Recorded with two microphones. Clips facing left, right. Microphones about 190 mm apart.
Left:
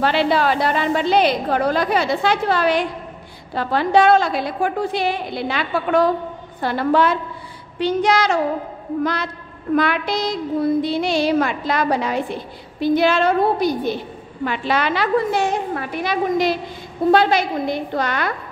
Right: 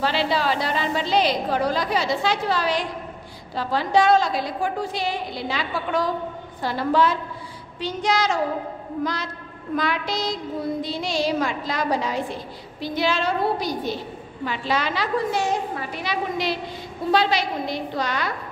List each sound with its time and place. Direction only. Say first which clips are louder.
0.0 s a woman's voice: left 5 dB; 55° left (ahead or behind)